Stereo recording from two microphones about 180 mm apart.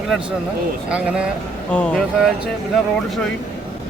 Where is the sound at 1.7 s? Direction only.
5° left (ahead or behind).